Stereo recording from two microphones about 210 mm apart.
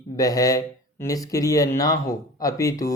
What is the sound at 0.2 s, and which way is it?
Speech, 15° left (ahead or behind).